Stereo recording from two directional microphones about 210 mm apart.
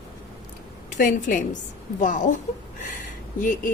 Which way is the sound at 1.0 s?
40° left (ahead or behind).